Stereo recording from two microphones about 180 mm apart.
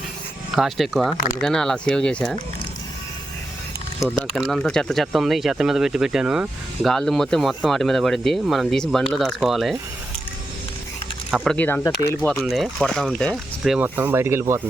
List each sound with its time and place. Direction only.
0.5 s speech: centre (ahead or behind)
1.1 s speech: 45° left (ahead or behind)
1.4 s speech: 5° left (ahead or behind)
4.4 s speech: centre (ahead or behind)
11.3 s speech: 5° right (ahead or behind)
11.5 s speech: 10° left (ahead or behind)
13.7 s speech: 10° right (ahead or behind)